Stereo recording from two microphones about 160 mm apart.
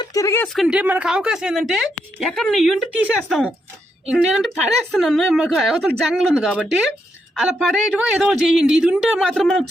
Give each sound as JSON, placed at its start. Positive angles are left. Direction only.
{"t": 0.0, "sound": "speech", "side_deg": 20}
{"t": 0.4, "sound": "a woman's voice", "side_deg": 0}